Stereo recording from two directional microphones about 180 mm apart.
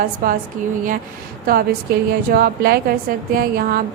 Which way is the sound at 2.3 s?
55° right (ahead or behind).